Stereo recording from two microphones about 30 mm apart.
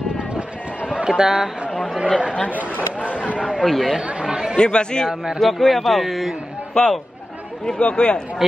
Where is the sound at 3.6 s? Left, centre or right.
Centre.